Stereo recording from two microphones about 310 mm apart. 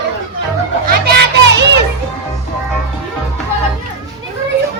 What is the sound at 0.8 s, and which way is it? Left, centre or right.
Children playing, right.